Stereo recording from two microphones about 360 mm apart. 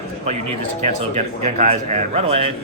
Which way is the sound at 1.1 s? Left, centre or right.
Centre.